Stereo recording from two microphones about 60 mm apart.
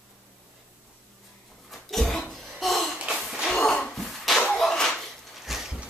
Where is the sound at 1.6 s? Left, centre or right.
Centre.